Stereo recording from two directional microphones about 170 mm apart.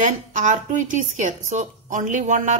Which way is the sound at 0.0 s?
45° right (ahead or behind).